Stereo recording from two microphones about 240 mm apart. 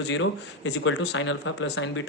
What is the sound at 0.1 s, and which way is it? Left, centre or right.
Speech, left.